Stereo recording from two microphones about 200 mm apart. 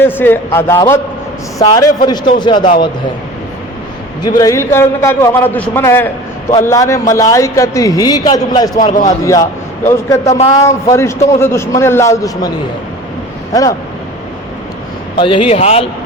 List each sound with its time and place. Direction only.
0.0 s a man's voice: 10° left (ahead or behind)
4.4 s a man's voice: 15° left (ahead or behind)
8.8 s speech: 40° left (ahead or behind)
9.0 s a man's voice: 15° left (ahead or behind)
13.5 s a man's voice: 15° left (ahead or behind)
15.1 s a man's voice: 25° left (ahead or behind)